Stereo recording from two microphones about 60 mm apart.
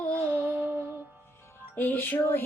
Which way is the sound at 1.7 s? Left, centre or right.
Left.